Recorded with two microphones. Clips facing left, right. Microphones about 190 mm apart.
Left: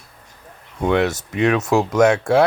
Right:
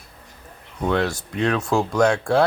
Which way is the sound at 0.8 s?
20° left (ahead or behind).